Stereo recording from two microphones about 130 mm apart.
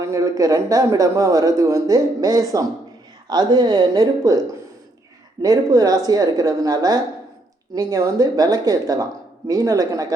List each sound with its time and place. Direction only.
0.0 s a man's voice: 25° right (ahead or behind)
5.4 s a man's voice: 25° right (ahead or behind)